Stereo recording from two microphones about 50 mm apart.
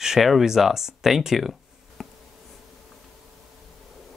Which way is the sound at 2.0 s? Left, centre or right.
Centre.